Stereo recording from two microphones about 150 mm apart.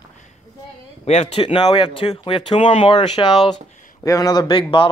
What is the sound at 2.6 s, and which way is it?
Speech, 50° left (ahead or behind).